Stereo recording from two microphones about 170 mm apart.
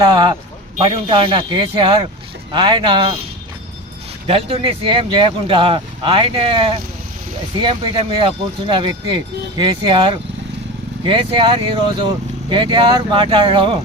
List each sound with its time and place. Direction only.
0.1 s speech: 25° right (ahead or behind)
4.3 s speech: 35° right (ahead or behind)